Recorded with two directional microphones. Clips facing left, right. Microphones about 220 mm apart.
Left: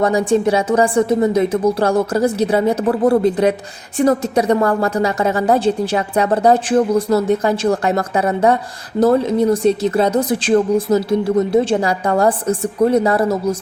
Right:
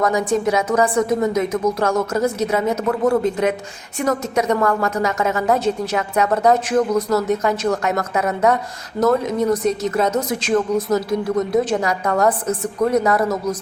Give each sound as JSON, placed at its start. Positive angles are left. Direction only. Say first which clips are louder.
{"t": 0.0, "sound": "a woman's voice", "louder": "left 4 dB", "side_deg": 30}